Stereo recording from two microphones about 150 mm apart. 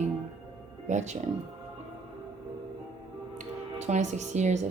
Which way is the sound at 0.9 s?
50° right (ahead or behind).